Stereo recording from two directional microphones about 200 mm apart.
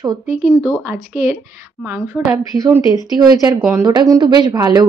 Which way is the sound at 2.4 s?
15° right (ahead or behind).